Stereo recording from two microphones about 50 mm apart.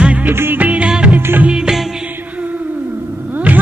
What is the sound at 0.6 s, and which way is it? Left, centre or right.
Music of bollywood, right.